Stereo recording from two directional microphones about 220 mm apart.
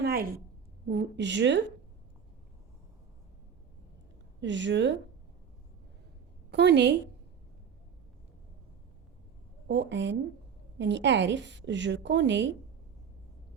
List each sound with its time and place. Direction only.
0.0 s a sound: 45° right (ahead or behind)
0.9 s a woman's voice: 55° right (ahead or behind)
4.4 s a woman's voice: 55° right (ahead or behind)
6.5 s a woman's voice: 50° right (ahead or behind)
9.6 s a woman's voice: 55° right (ahead or behind)